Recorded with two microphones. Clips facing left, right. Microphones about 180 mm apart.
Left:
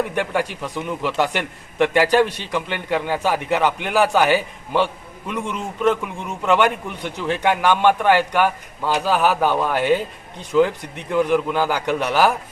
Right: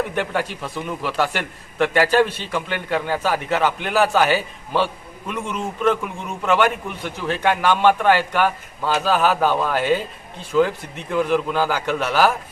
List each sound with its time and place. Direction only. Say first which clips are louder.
0.1 s a man's voice: left 1 dB; 15° left (ahead or behind)